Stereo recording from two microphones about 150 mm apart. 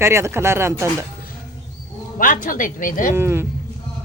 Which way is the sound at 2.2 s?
60° left (ahead or behind).